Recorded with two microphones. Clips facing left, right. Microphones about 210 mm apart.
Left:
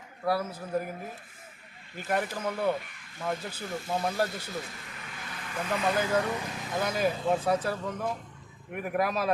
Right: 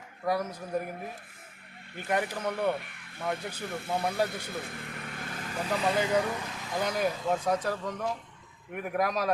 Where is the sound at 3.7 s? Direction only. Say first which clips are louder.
Left 1 dB; 60° right (ahead or behind).